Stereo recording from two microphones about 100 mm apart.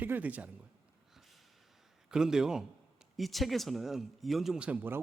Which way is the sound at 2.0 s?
5° right (ahead or behind).